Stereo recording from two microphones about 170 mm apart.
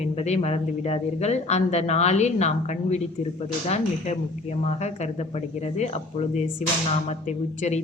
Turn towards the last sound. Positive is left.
turn(degrees=40)  # may be behind; listen again after turning